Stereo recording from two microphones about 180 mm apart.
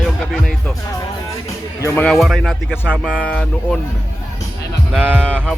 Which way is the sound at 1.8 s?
10° left (ahead or behind).